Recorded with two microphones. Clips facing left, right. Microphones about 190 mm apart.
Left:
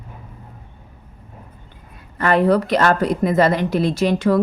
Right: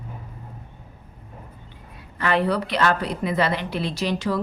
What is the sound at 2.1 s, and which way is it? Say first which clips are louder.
A woman's voice: left 6 dB; 45° left (ahead or behind).